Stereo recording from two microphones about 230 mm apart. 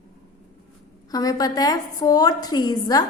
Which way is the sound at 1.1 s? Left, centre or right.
Centre.